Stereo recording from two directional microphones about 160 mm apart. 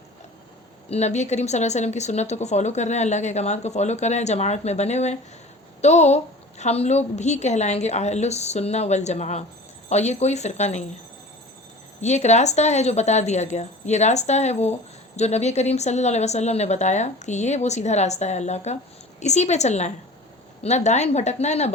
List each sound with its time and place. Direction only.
0.9 s a woman's voice: 45° left (ahead or behind)
11.9 s a woman's voice: 45° left (ahead or behind)